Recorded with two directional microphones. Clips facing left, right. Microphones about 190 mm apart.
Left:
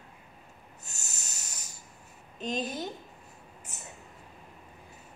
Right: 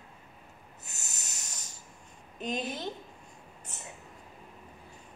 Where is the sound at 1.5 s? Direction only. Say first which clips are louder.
Even; 10° left (ahead or behind).